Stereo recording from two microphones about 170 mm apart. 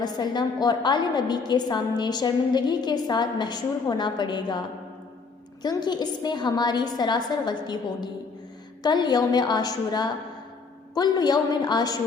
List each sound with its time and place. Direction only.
0.0 s a woman's voice: 25° left (ahead or behind)
5.6 s a woman's voice: 25° left (ahead or behind)